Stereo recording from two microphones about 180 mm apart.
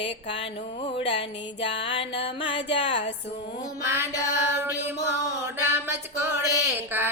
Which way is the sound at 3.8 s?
15° right (ahead or behind).